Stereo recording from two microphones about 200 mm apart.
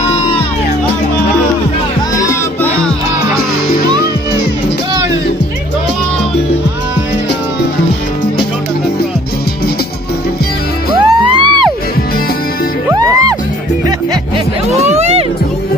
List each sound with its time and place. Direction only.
2.1 s music: 15° left (ahead or behind)
11.0 s music: 25° right (ahead or behind)
12.9 s music: 15° right (ahead or behind)
14.8 s music: 35° right (ahead or behind)